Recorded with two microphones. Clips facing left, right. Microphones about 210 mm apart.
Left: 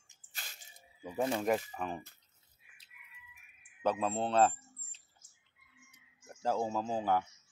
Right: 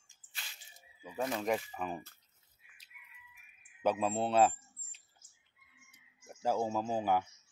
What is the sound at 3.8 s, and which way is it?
Speech, 10° right (ahead or behind).